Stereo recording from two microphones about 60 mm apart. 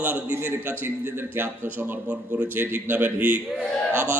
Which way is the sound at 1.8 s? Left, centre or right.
Right.